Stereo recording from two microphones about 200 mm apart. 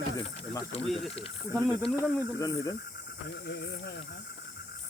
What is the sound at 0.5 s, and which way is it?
Speech, 30° left (ahead or behind).